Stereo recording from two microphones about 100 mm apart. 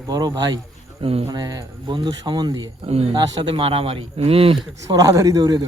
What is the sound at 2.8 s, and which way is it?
Speech, 90° right.